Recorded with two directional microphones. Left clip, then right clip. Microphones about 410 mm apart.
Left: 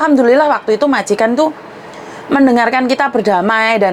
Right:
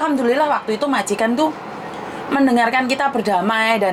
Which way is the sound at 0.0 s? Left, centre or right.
Left.